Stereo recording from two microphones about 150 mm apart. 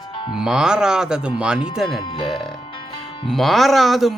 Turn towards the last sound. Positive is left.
turn(degrees=0)  # may be behind; listen again after turning